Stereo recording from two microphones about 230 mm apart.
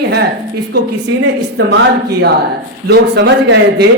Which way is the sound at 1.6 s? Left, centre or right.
Right.